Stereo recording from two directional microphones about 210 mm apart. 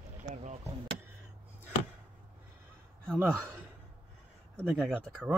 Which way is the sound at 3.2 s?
10° right (ahead or behind).